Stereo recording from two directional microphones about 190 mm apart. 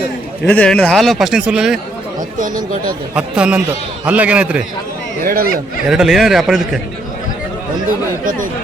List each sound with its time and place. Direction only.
0.4 s a man's voice: 5° left (ahead or behind)
3.2 s a man's voice: 5° right (ahead or behind)
5.2 s speech: 50° right (ahead or behind)
5.9 s a man's voice: centre (ahead or behind)
8.2 s speech: 45° right (ahead or behind)